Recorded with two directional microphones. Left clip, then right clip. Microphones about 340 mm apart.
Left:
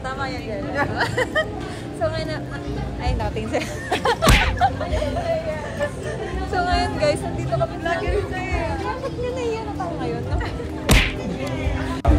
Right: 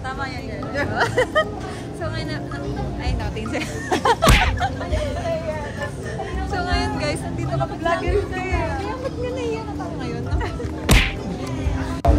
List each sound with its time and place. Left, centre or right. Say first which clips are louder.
0.9 s speech: right 6 dB; right
3.5 s speech: right 1 dB; centre
4.2 s music: even; centre
6.5 s music: left 3 dB; centre
7.8 s speech: right 2 dB; right
10.9 s whip: even; centre